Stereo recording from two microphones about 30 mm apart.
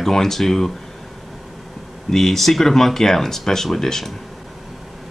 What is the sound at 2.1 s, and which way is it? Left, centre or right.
Speech, centre.